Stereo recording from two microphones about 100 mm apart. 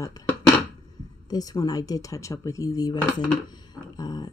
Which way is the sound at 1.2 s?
40° left (ahead or behind).